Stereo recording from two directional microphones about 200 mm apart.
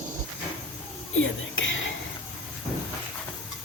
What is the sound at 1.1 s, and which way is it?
Whispering, 75° left (ahead or behind).